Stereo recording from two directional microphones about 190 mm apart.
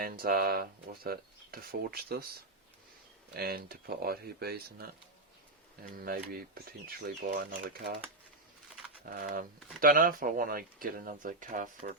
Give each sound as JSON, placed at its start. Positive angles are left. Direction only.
{"t": 0.0, "sound": "speech", "side_deg": -50}
{"t": 3.3, "sound": "speech", "side_deg": -55}
{"t": 9.0, "sound": "speech", "side_deg": -50}